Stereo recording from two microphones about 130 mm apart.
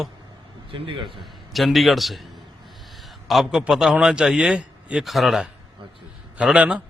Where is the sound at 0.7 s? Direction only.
40° right (ahead or behind).